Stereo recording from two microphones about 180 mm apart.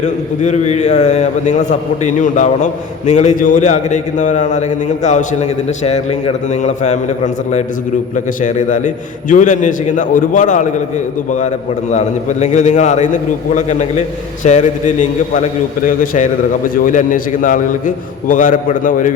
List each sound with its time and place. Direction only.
0.0 s a man's voice: 40° left (ahead or behind)
8.1 s a man's voice: 45° left (ahead or behind)
16.1 s a man's voice: 45° left (ahead or behind)